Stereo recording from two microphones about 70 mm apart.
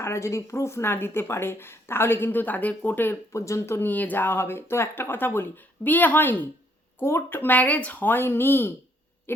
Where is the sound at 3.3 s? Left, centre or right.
Left.